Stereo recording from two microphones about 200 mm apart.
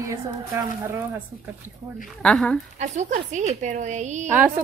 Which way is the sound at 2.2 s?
5° left (ahead or behind).